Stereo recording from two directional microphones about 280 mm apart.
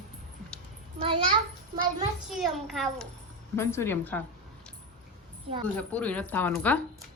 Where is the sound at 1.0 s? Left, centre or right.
Centre.